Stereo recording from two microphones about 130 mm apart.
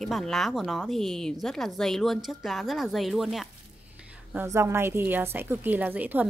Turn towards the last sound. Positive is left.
turn(degrees=-15)  # may be behind; listen again after turning